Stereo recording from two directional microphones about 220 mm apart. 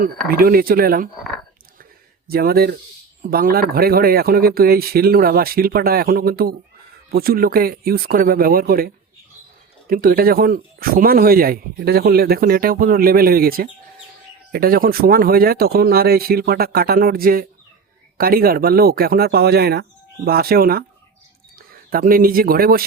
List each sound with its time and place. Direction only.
0.3 s speech: 40° right (ahead or behind)
1.8 s a sound: 45° right (ahead or behind)
3.2 s speech: 40° right (ahead or behind)